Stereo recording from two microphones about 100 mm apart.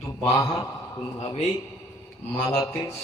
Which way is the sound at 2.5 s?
30° left (ahead or behind).